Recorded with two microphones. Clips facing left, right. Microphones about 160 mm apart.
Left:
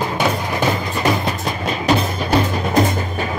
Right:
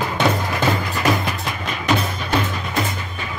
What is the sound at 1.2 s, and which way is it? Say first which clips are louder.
Music: left 4 dB; 35° left (ahead or behind).